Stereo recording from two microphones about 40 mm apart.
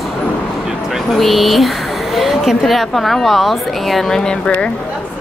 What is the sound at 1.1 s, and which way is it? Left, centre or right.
A woman's voice, centre.